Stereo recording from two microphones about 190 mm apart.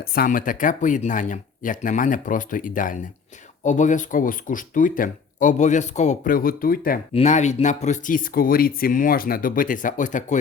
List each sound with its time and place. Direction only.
0.0 s speech: 50° left (ahead or behind)
7.1 s speech: 35° left (ahead or behind)